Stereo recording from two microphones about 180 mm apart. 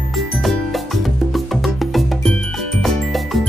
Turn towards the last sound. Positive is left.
turn(degrees=0)  # may be behind; listen again after turning